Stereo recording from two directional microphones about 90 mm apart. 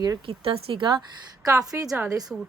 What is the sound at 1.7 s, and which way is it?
Speech, 40° right (ahead or behind).